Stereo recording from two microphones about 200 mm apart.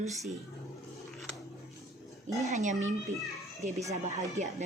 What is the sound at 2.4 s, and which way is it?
Speech, 35° right (ahead or behind).